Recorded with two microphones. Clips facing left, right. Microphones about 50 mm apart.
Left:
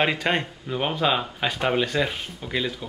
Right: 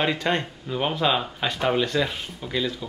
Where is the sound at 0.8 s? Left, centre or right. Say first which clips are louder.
Even; centre.